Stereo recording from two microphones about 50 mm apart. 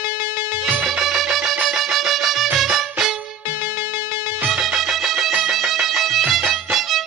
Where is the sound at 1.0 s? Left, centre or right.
Centre.